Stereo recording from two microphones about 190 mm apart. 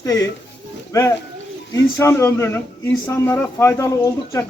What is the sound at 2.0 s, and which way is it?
A man's voice, 15° left (ahead or behind).